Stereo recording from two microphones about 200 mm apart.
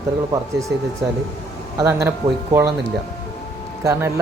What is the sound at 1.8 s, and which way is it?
Speech, 15° right (ahead or behind).